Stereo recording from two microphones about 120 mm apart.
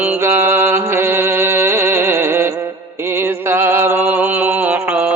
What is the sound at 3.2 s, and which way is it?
Music, 20° right (ahead or behind).